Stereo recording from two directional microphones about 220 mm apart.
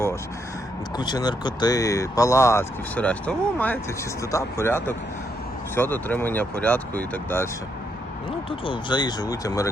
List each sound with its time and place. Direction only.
0.9 s speech: 20° left (ahead or behind)
8.4 s speech: 20° left (ahead or behind)